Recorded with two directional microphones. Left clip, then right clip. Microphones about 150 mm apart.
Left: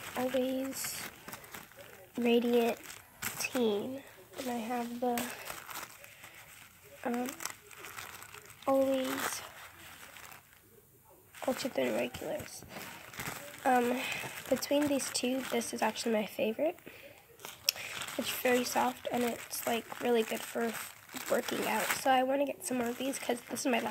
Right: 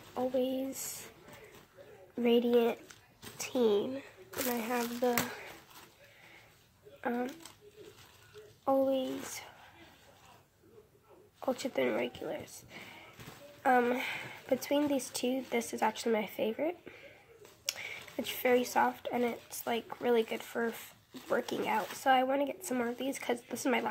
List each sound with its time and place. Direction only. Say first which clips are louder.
0.1 s speech: even; 20° left (ahead or behind)
2.2 s speech: right 1 dB; 20° left (ahead or behind)
7.0 s speech: right 1 dB; 20° left (ahead or behind)
8.6 s speech: even; 20° left (ahead or behind)
11.4 s speech: even; 20° left (ahead or behind)